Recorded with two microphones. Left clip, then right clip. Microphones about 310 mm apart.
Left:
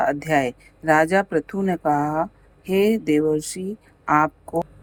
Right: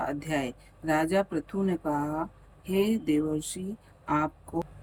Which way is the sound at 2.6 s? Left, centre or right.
Left.